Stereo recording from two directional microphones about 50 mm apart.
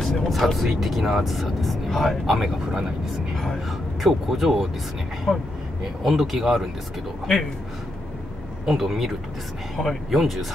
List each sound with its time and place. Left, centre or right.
0.0 s speech: centre
4.0 s speech: centre
5.3 s speech: centre
6.0 s speech: centre
8.6 s speech: centre
9.8 s speech: centre
10.1 s speech: centre